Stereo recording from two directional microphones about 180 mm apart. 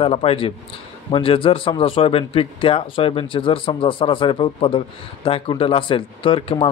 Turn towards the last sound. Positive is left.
turn(degrees=30)  # may be behind; listen again after turning